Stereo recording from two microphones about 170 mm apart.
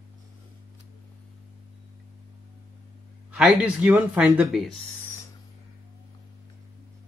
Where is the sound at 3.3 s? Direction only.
5° right (ahead or behind).